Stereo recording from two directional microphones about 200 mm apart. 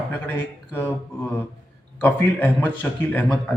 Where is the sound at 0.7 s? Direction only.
10° left (ahead or behind).